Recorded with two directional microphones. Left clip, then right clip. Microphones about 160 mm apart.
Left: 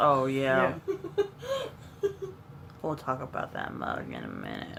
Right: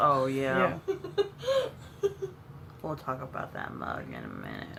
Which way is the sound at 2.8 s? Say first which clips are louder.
Left 3 dB; 30° left (ahead or behind).